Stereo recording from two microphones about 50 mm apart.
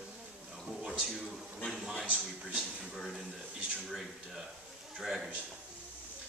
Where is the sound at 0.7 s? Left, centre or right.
Centre.